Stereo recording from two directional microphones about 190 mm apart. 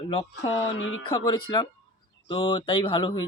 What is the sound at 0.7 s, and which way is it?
Speech, 90° left.